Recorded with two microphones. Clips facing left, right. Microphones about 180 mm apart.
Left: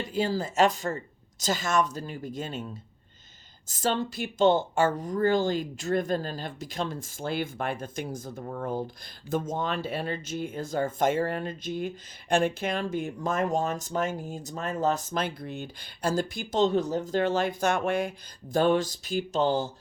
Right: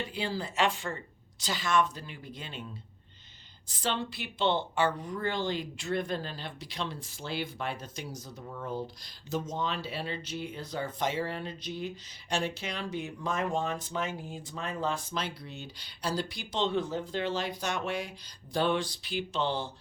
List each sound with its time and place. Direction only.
0.0 s speech: 45° left (ahead or behind)
3.7 s speech: 45° left (ahead or behind)